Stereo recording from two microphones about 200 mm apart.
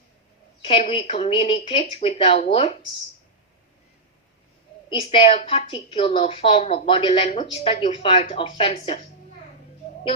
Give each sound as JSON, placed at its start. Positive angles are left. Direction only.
{"t": 0.6, "sound": "speech", "side_deg": 25}
{"t": 4.9, "sound": "speech", "side_deg": 25}